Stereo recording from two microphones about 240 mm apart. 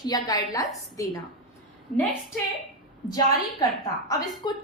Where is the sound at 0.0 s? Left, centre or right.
Centre.